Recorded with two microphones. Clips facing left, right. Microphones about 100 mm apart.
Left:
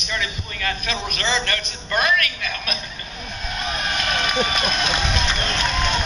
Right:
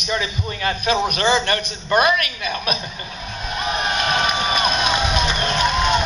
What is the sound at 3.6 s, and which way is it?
Vehicle, 25° right (ahead or behind).